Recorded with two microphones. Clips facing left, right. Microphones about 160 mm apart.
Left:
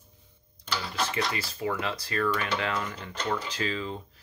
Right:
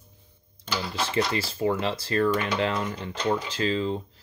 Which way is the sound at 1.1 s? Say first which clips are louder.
Right 5 dB; 30° right (ahead or behind).